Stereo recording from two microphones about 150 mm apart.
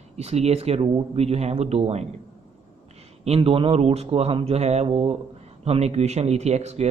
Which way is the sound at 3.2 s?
40° right (ahead or behind).